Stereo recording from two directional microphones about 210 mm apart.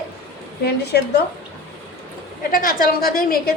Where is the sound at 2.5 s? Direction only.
40° left (ahead or behind).